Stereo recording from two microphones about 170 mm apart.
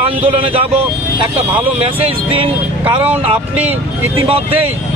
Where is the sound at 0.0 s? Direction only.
35° right (ahead or behind).